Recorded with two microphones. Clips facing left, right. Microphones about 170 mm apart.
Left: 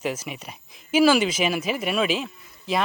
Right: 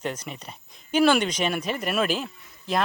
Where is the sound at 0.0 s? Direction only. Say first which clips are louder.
Left 3 dB; 5° left (ahead or behind).